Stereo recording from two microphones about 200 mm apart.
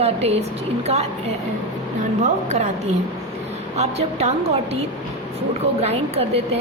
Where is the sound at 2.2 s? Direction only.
35° right (ahead or behind).